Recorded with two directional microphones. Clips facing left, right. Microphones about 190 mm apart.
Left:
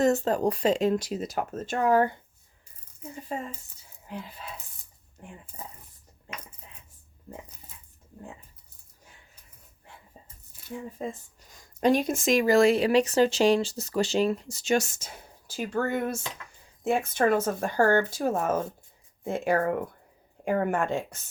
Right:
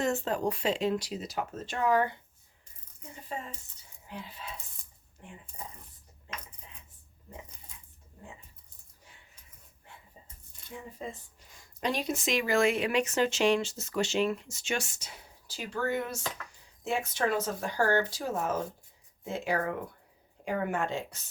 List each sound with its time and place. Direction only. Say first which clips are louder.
0.0 s speech: left 6 dB; 40° left (ahead or behind)
10.9 s speech: left 6 dB; 45° left (ahead or behind)